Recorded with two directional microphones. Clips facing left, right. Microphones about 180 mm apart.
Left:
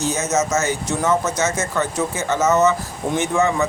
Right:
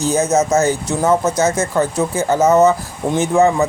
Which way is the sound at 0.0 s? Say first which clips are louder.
Right 5 dB; 30° right (ahead or behind).